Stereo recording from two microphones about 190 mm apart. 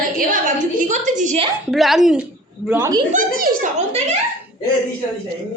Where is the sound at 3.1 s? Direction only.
45° right (ahead or behind).